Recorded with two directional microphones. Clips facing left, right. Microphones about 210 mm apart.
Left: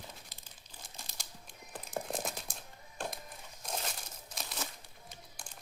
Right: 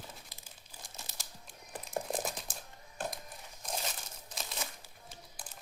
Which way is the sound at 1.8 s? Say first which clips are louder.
Right 2 dB; centre (ahead or behind).